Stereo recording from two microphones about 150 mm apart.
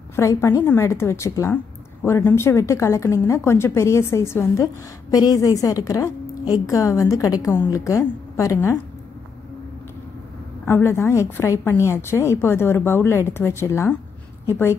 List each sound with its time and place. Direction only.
0.1 s a woman's voice: 20° left (ahead or behind)
10.6 s a woman's voice: 15° left (ahead or behind)